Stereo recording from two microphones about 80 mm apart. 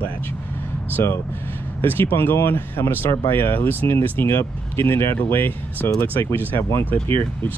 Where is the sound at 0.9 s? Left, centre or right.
Left.